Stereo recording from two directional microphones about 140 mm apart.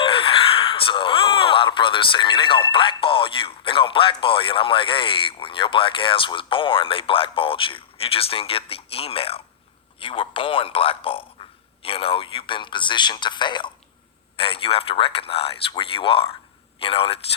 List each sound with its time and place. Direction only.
0.0 s a man's voice: 40° left (ahead or behind)